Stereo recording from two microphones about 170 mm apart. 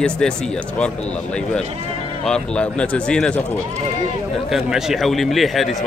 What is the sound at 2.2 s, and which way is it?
Speech, 5° left (ahead or behind).